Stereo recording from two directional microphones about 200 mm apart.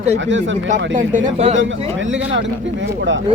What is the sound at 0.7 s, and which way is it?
Speech, 40° right (ahead or behind).